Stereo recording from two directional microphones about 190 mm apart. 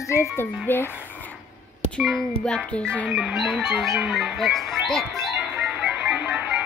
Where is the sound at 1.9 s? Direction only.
Centre (ahead or behind).